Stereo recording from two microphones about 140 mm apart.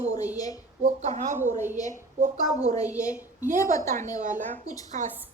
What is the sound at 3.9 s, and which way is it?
A woman's voice, 65° right (ahead or behind).